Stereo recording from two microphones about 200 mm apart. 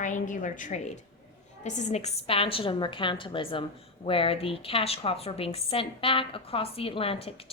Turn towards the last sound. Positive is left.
turn(degrees=30)  # may be behind; listen again after turning